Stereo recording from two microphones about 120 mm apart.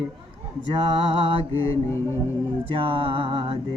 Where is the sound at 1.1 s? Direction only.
50° right (ahead or behind).